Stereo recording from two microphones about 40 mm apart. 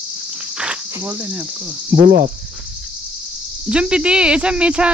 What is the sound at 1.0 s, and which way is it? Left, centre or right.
Speech, right.